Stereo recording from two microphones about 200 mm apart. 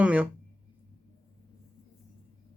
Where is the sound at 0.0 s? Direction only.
5° right (ahead or behind).